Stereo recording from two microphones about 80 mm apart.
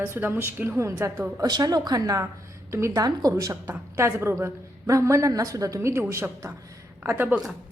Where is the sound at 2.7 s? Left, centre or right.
Right.